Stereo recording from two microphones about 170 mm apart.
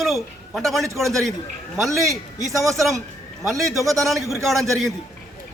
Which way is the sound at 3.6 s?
20° right (ahead or behind).